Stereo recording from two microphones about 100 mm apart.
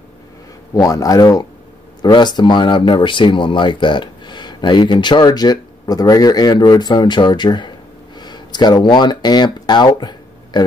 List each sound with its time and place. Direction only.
0.7 s speech: 35° left (ahead or behind)